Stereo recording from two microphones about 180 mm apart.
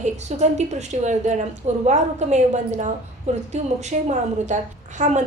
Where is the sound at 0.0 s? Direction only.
40° right (ahead or behind).